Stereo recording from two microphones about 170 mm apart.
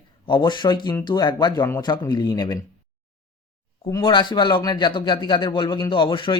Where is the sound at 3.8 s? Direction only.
25° left (ahead or behind).